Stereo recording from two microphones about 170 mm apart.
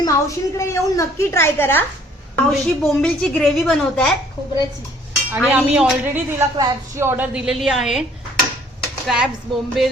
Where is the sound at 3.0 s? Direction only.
5° left (ahead or behind).